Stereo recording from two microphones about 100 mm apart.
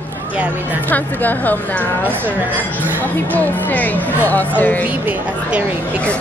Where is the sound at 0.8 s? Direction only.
15° left (ahead or behind).